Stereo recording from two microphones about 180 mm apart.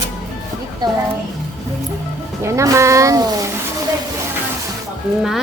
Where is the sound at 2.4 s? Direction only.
15° right (ahead or behind).